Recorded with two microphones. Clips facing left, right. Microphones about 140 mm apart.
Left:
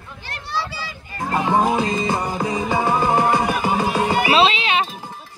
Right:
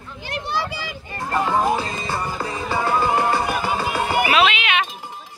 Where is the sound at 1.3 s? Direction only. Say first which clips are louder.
Left 2 dB; 15° left (ahead or behind).